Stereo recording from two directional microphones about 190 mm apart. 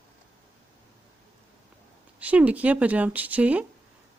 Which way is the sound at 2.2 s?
5° right (ahead or behind).